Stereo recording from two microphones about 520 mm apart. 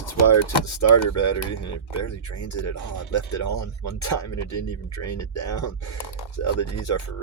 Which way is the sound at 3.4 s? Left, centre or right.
Left.